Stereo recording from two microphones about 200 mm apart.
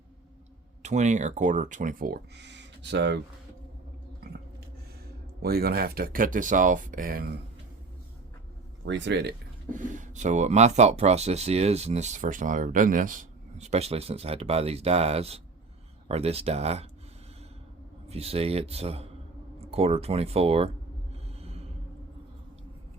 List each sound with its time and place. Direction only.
0.8 s speech: 35° right (ahead or behind); by 3.2 s 60° right (ahead or behind)
5.4 s speech: 50° right (ahead or behind)
8.8 s speech: 65° right (ahead or behind)
9.6 s speech: 40° right (ahead or behind)
18.1 s speech: 30° right (ahead or behind)
19.5 s a sound: 30° right (ahead or behind)